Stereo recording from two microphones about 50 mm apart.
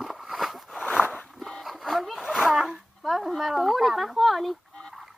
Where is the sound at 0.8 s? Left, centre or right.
Left.